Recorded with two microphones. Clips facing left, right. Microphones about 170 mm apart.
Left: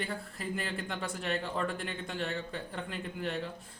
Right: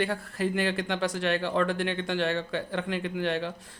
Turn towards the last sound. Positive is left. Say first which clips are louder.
# right 7 dB
turn(degrees=-90)